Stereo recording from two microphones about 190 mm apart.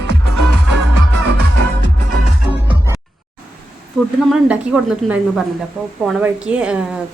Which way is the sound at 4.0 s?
Centre (ahead or behind).